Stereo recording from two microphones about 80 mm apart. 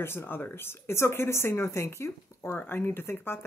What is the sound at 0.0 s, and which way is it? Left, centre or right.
Speech, left.